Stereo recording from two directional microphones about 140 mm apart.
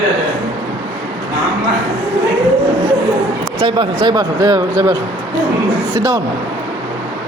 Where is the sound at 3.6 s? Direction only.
35° right (ahead or behind).